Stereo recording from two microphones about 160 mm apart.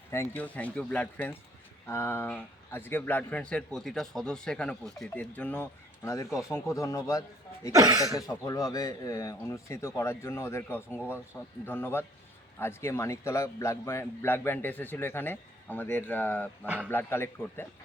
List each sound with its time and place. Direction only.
0.1 s a man's voice: 15° left (ahead or behind)
7.7 s speech: 20° right (ahead or behind)
8.1 s a man's voice: 20° left (ahead or behind)
16.6 s speech: 10° right (ahead or behind)
16.9 s a man's voice: 15° left (ahead or behind)